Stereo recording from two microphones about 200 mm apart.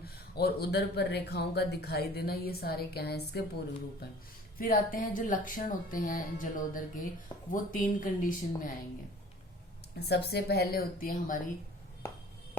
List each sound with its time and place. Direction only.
0.0 s speech: 50° left (ahead or behind)
4.5 s speech: 45° left (ahead or behind)
9.9 s speech: 55° left (ahead or behind)